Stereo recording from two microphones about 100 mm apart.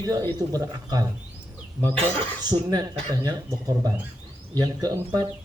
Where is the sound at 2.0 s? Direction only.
65° right (ahead or behind).